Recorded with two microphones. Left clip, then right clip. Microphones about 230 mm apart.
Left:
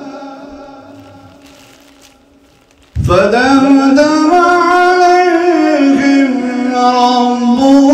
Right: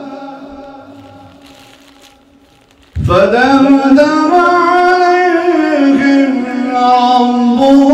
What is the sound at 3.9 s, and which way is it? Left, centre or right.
Music, left.